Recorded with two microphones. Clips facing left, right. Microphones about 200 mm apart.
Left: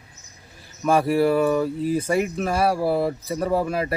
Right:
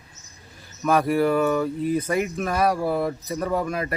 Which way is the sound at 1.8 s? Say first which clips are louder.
Left 1 dB; 30° left (ahead or behind).